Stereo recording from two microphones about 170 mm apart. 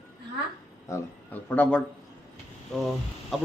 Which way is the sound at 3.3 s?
Centre (ahead or behind).